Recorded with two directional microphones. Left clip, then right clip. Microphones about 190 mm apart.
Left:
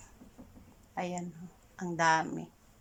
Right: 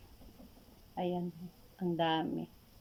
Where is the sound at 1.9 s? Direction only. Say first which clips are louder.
Left 6 dB; 10° right (ahead or behind).